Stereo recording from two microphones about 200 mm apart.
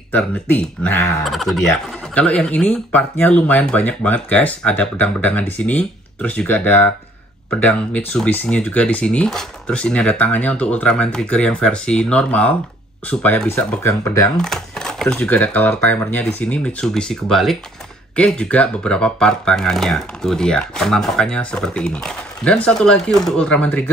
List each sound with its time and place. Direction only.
0.1 s speech: 10° left (ahead or behind)